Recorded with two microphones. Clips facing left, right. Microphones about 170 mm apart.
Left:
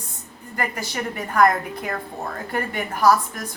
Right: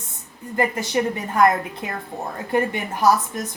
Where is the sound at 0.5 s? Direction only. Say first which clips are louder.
Right 6 dB; 20° right (ahead or behind).